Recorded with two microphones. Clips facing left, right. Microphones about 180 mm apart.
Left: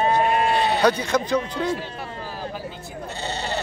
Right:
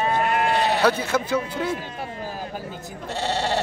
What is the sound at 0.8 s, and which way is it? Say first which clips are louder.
Speech: left 1 dB; 5° right (ahead or behind).